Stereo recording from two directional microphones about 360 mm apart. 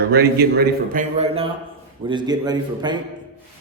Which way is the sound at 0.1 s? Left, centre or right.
Right.